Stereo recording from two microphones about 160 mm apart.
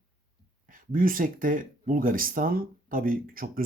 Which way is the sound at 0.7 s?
60° right (ahead or behind).